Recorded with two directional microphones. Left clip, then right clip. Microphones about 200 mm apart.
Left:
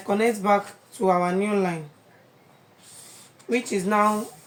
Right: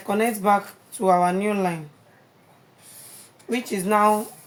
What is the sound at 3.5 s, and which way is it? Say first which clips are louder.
Speech: right 1 dB; 30° right (ahead or behind).